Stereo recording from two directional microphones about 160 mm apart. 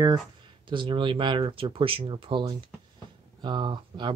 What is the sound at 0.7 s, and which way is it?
Speech, 30° right (ahead or behind).